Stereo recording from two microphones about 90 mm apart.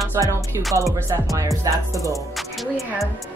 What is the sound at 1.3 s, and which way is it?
Speech, 40° right (ahead or behind).